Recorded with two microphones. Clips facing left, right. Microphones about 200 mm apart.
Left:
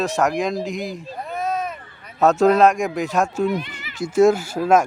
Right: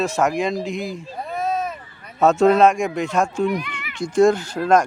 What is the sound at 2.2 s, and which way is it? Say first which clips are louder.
Speech: even; centre (ahead or behind).